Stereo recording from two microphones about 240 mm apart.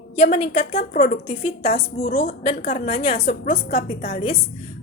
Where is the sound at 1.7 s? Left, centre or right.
Left.